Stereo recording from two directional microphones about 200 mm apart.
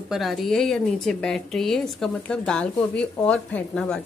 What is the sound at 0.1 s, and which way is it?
Speech, centre (ahead or behind).